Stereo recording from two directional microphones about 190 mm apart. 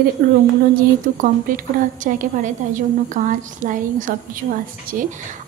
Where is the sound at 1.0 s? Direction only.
45° right (ahead or behind).